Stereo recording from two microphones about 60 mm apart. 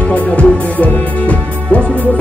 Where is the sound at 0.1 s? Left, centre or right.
Left.